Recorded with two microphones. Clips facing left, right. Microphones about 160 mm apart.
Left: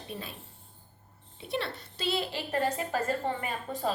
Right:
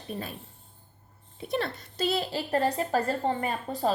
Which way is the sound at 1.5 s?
45° right (ahead or behind).